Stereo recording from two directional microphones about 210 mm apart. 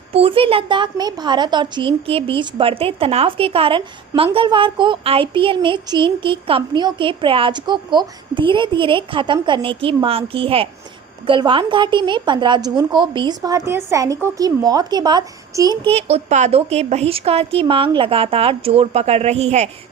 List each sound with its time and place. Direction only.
0.1 s a woman's voice: 25° right (ahead or behind)